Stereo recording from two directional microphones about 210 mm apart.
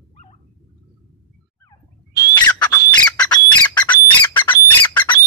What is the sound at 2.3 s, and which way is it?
Bird, 20° left (ahead or behind).